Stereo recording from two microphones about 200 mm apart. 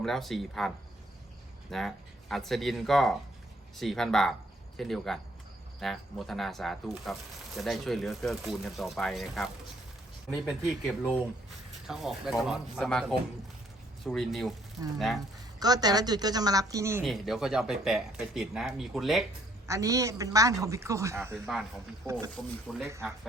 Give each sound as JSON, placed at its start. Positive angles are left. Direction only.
{"t": 0.0, "sound": "speech", "side_deg": 0}
{"t": 1.7, "sound": "speech", "side_deg": 0}
{"t": 10.5, "sound": "speech", "side_deg": 0}
{"t": 15.6, "sound": "speech", "side_deg": -20}
{"t": 17.0, "sound": "speech", "side_deg": 0}
{"t": 19.6, "sound": "a woman's voice", "side_deg": -15}
{"t": 21.4, "sound": "speech", "side_deg": 0}
{"t": 22.9, "sound": "a woman's voice", "side_deg": -15}